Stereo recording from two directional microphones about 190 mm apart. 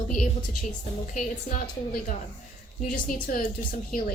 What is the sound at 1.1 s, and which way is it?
Speech, 45° left (ahead or behind).